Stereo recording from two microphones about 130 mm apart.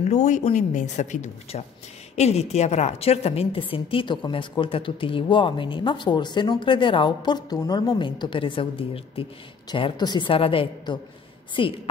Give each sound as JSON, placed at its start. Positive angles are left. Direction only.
{"t": 0.0, "sound": "a woman's voice", "side_deg": 65}
{"t": 2.1, "sound": "a woman's voice", "side_deg": 55}